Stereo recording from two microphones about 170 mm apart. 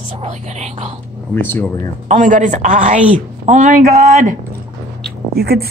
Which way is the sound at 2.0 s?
45° right (ahead or behind).